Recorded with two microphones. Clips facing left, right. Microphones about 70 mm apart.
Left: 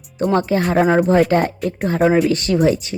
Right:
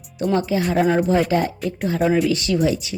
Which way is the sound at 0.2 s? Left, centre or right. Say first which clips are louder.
Left 3 dB; left.